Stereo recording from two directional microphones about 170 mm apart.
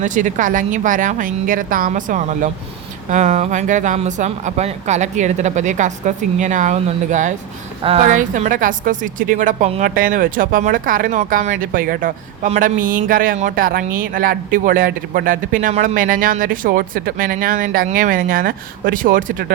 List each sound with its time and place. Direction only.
0.0 s speech: 50° right (ahead or behind)
7.8 s a woman's voice: 35° right (ahead or behind)
8.0 s speech: 50° right (ahead or behind)
9.8 s speech: 55° right (ahead or behind)
15.7 s speech: 40° right (ahead or behind)
16.0 s speech: 55° right (ahead or behind)